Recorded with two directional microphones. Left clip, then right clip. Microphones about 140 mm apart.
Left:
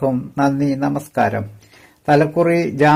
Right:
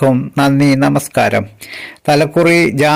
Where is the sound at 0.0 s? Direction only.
35° right (ahead or behind).